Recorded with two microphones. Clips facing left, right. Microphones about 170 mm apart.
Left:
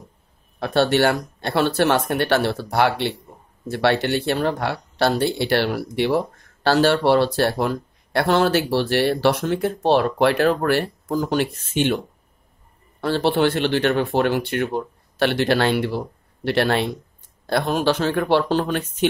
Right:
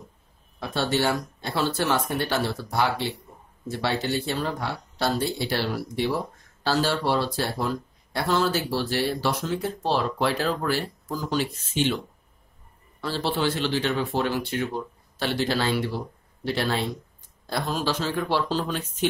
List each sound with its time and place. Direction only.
0.6 s speech: 65° left (ahead or behind)
13.0 s speech: 65° left (ahead or behind)